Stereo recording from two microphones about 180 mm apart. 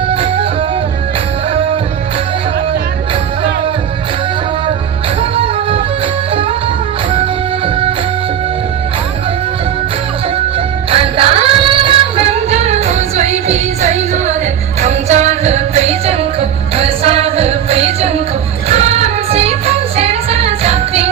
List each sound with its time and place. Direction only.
0.1 s music: 30° right (ahead or behind)
10.9 s music: 30° right (ahead or behind)